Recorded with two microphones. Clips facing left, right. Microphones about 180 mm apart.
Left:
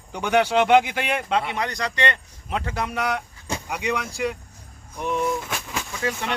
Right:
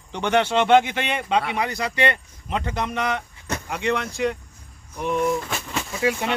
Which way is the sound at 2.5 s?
5° left (ahead or behind).